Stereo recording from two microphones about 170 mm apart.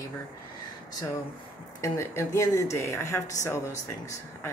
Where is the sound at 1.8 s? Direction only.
15° left (ahead or behind).